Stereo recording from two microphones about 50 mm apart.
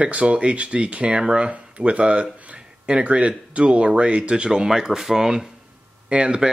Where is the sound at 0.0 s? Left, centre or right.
Right; by 5.5 s centre.